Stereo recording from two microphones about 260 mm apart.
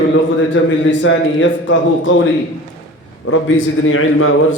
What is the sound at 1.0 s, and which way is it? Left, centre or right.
A man's voice, left.